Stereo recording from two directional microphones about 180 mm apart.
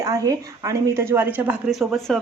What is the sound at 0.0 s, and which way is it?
A woman's voice, 20° right (ahead or behind).